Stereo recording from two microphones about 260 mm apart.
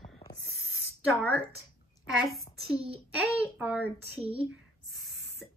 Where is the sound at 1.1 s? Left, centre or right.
Centre.